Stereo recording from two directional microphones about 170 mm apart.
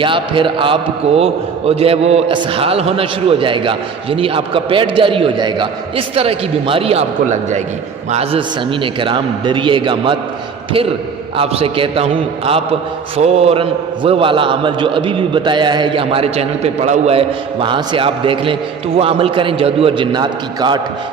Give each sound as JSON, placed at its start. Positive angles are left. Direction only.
{"t": 0.0, "sound": "a man's voice", "side_deg": -30}
{"t": 11.3, "sound": "a man's voice", "side_deg": -35}
{"t": 13.1, "sound": "a man's voice", "side_deg": -40}